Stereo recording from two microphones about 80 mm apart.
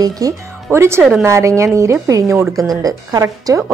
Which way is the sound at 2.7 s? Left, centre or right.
Right.